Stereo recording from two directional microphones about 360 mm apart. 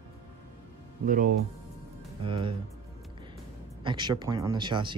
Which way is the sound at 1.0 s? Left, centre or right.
Right.